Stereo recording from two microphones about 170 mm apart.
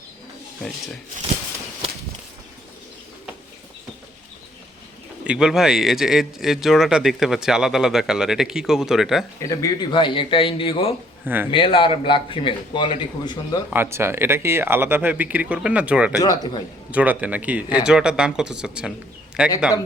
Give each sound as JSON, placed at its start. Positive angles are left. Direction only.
{"t": 5.2, "sound": "a man's voice", "side_deg": -5}
{"t": 9.4, "sound": "a man's voice", "side_deg": 20}
{"t": 13.9, "sound": "speech", "side_deg": -15}
{"t": 16.2, "sound": "a man's voice", "side_deg": 20}
{"t": 16.9, "sound": "a man's voice", "side_deg": -10}